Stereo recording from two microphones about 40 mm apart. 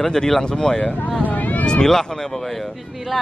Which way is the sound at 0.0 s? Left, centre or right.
Centre.